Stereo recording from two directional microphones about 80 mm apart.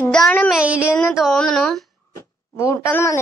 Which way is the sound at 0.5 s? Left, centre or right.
Centre.